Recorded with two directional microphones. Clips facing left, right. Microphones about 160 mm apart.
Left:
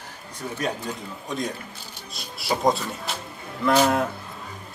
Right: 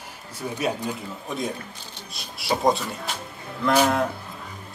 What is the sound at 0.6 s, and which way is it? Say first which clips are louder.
A man's voice: right 2 dB; 10° right (ahead or behind).